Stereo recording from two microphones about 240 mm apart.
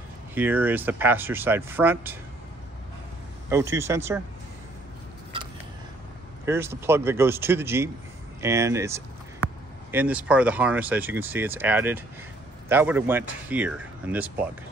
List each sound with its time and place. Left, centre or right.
0.3 s speech: centre
3.4 s speech: centre
6.4 s speech: centre